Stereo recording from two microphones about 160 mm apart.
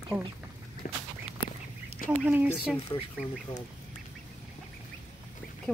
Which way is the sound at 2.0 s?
60° left (ahead or behind).